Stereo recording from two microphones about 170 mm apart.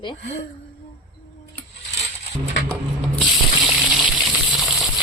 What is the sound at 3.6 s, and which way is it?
Water, 5° right (ahead or behind).